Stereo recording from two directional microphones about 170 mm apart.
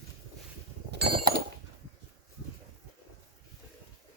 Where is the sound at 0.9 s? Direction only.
75° right (ahead or behind).